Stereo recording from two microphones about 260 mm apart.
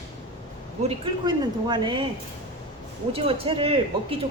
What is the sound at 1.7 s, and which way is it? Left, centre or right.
Speech, centre.